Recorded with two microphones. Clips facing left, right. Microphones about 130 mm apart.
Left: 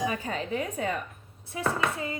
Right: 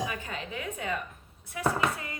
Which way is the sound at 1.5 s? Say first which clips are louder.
Even; 25° left (ahead or behind).